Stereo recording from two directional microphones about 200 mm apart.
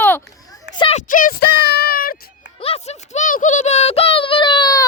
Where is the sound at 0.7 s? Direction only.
30° left (ahead or behind).